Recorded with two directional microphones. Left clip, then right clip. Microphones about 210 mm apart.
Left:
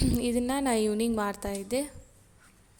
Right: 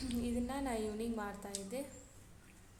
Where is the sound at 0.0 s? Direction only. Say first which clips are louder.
Left 12 dB; 45° left (ahead or behind).